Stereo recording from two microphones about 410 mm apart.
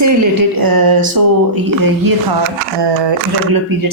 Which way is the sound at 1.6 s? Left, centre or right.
Right.